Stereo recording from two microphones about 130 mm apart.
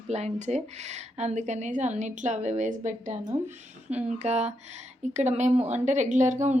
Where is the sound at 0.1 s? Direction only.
60° right (ahead or behind).